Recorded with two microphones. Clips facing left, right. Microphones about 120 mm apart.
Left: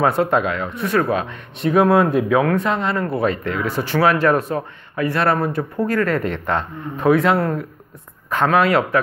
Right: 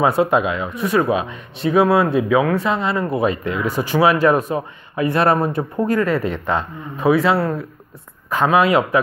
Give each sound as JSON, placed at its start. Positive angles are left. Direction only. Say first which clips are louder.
{"t": 0.0, "sound": "speech", "louder": "right 1 dB", "side_deg": -10}